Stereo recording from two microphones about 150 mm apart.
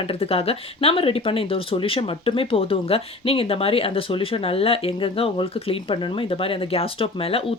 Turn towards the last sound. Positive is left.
turn(degrees=40)  # may be behind; listen again after turning